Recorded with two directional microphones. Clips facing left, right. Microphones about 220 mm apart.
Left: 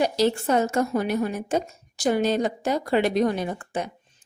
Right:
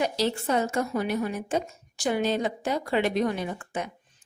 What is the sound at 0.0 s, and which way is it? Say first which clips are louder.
A woman's voice: left 5 dB; 45° left (ahead or behind).